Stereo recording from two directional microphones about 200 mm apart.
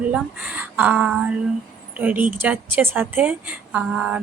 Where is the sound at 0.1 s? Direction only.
5° right (ahead or behind).